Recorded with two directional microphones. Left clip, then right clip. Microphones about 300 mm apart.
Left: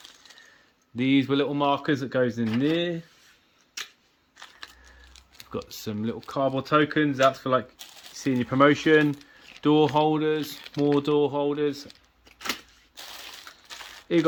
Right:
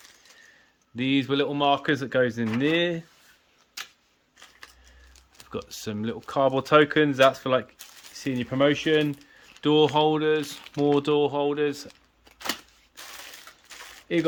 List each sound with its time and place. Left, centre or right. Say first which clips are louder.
0.9 s speech: left 1 dB; centre
4.9 s speech: left 4 dB; centre
14.1 s speech: left 2 dB; centre